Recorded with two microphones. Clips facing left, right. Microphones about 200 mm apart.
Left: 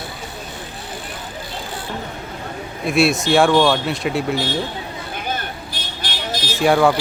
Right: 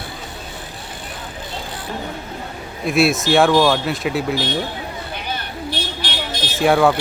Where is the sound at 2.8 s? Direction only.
Centre (ahead or behind).